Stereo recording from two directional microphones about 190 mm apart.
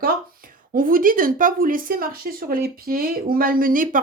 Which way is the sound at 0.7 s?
45° right (ahead or behind).